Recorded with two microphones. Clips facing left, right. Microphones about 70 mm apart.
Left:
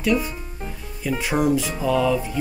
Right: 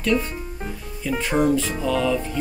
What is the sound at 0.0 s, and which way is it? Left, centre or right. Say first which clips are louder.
Speech: even; centre.